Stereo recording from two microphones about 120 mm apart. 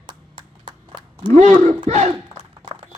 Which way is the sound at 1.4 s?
75° right (ahead or behind).